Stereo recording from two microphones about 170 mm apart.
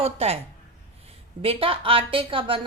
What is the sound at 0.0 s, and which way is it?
Speech, 40° right (ahead or behind).